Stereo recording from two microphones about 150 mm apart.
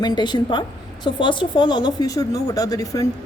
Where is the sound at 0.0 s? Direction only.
30° left (ahead or behind).